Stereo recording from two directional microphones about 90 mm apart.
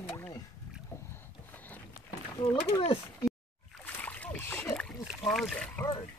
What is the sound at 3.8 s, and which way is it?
Splash, 20° left (ahead or behind).